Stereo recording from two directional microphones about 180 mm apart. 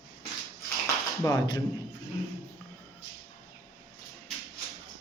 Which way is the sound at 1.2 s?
25° left (ahead or behind).